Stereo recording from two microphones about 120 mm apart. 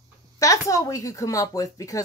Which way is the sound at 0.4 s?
30° left (ahead or behind).